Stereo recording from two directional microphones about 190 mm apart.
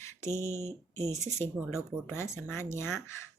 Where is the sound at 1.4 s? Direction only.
15° left (ahead or behind).